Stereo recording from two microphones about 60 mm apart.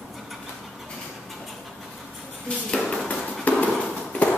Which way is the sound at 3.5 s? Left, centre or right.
Left.